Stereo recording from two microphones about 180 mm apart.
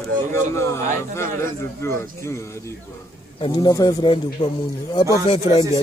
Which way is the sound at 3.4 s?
25° left (ahead or behind).